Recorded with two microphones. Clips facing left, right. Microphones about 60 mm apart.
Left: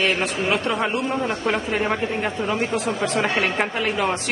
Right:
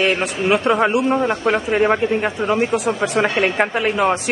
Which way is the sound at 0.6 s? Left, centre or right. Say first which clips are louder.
Right 7 dB; right.